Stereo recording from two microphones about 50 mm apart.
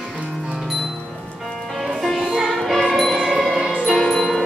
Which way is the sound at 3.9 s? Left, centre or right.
Centre.